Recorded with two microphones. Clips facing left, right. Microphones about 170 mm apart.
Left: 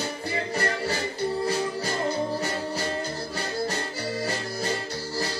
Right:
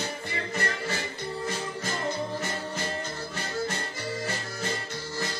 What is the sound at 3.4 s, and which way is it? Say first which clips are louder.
Music: left 2 dB; 35° left (ahead or behind).